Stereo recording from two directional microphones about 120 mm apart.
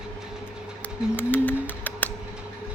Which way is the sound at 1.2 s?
15° left (ahead or behind).